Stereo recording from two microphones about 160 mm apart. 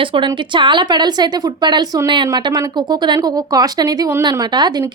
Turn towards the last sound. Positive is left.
turn(degrees=-25)  # may be behind; listen again after turning